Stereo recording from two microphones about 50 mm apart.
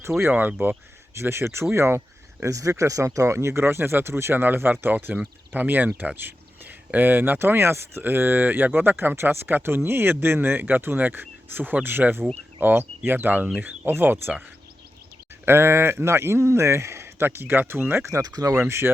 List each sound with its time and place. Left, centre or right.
0.3 s speech: right
1.1 s speech: right
2.4 s speech: right
4.4 s speech: right
8.0 s speech: right
15.4 s speech: right
18.0 s speech: right
18.7 s speech: right